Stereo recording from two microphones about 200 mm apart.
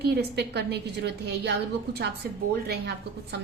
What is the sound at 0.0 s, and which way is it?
A woman's voice, 55° right (ahead or behind).